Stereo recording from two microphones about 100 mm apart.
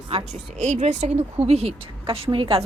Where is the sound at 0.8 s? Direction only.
90° right; by 2.2 s 75° right (ahead or behind).